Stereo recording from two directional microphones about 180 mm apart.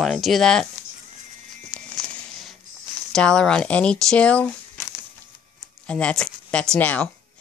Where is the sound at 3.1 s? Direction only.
5° left (ahead or behind).